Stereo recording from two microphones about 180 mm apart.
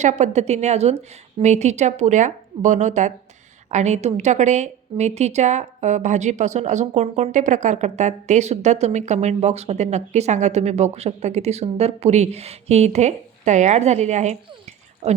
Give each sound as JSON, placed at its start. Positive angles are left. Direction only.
{"t": 0.0, "sound": "a woman's voice", "side_deg": -40}